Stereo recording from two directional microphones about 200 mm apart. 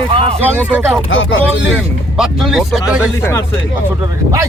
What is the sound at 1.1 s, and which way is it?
Speech, 75° left (ahead or behind).